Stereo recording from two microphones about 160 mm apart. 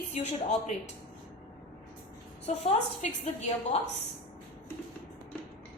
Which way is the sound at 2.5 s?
40° left (ahead or behind).